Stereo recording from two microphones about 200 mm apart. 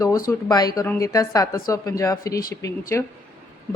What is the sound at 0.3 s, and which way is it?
A woman's voice, 20° left (ahead or behind).